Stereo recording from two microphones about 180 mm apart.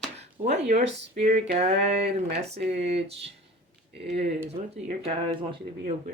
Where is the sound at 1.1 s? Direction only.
35° right (ahead or behind).